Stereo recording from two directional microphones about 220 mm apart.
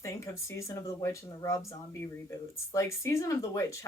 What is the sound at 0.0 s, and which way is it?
Speech, 15° left (ahead or behind).